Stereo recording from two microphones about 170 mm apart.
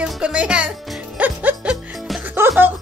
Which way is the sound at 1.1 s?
10° right (ahead or behind).